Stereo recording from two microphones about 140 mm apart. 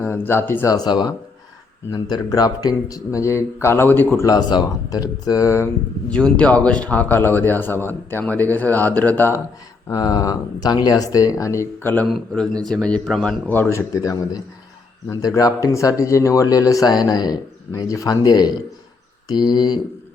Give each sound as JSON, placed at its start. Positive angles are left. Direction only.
{"t": 0.0, "sound": "a man's voice", "side_deg": 15}
{"t": 6.1, "sound": "a man's voice", "side_deg": 5}
{"t": 9.9, "sound": "a man's voice", "side_deg": 25}
{"t": 12.0, "sound": "a man's voice", "side_deg": 0}